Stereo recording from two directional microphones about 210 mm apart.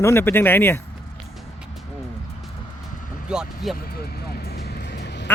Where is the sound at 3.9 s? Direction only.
45° left (ahead or behind).